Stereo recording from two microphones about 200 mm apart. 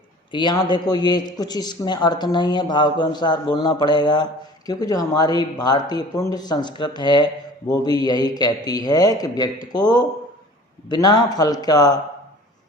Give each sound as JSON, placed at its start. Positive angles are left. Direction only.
{"t": 0.3, "sound": "a man's voice", "side_deg": 25}